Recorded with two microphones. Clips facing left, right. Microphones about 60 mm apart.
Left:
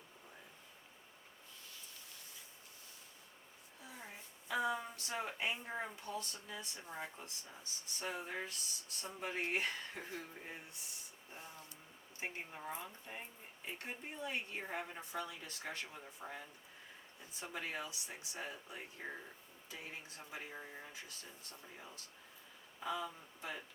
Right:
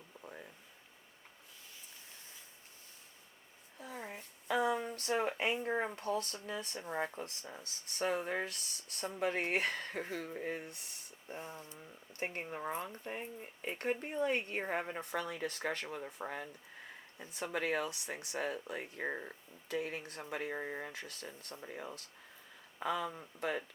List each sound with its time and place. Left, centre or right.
3.8 s a sound: right
6.0 s speech: right
12.1 s speech: right